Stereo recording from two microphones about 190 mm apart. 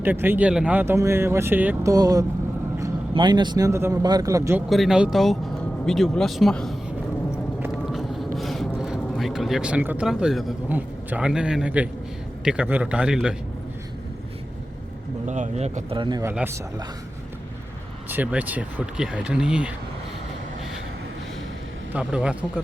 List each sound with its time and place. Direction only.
0.0 s speech: 10° right (ahead or behind)
4.7 s speech: centre (ahead or behind)
7.8 s speech: centre (ahead or behind)
15.3 s speech: 35° right (ahead or behind)
16.2 s speech: 10° right (ahead or behind)
18.1 s speech: 10° right (ahead or behind)
21.9 s speech: 5° right (ahead or behind)